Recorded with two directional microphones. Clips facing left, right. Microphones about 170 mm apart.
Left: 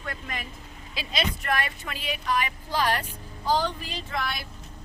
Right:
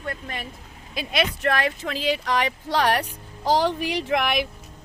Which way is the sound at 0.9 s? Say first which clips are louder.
Right 5 dB; 60° right (ahead or behind).